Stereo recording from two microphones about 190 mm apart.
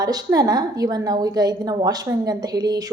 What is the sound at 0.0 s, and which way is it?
A woman's voice, 20° right (ahead or behind).